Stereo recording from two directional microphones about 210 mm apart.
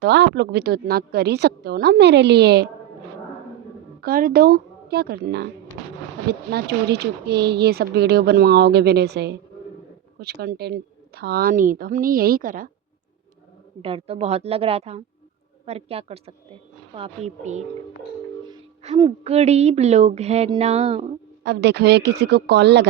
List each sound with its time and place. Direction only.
0.0 s speech: 55° right (ahead or behind)
4.0 s a woman's voice: 45° right (ahead or behind)
13.8 s a woman's voice: 25° right (ahead or behind)
21.4 s speech: 55° right (ahead or behind)